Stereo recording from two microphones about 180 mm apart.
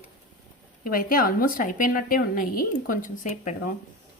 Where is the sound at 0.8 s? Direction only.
50° left (ahead or behind).